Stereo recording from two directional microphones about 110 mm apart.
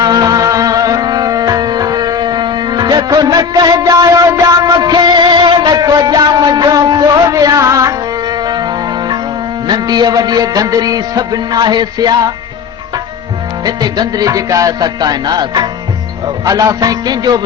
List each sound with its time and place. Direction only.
0.0 s music: 35° right (ahead or behind)
13.7 s music: 40° right (ahead or behind)